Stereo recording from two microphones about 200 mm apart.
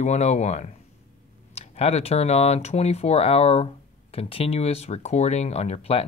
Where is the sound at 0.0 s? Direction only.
35° left (ahead or behind).